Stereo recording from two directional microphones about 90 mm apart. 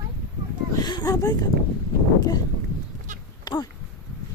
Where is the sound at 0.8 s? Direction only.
50° left (ahead or behind).